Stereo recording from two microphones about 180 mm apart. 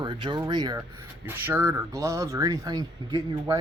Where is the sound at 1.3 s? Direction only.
10° right (ahead or behind).